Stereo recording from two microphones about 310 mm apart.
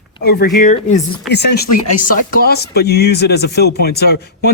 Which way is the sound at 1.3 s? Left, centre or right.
Left.